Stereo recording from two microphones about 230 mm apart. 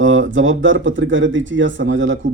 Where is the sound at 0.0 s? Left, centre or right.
Right.